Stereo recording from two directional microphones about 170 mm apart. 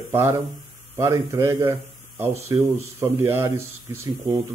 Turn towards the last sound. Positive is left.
turn(degrees=-15)  # may be behind; listen again after turning